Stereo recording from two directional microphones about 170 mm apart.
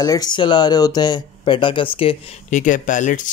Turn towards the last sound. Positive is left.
turn(degrees=50)  # may be behind; listen again after turning